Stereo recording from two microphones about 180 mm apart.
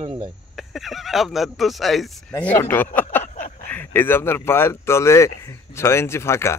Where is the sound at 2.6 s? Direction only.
10° left (ahead or behind).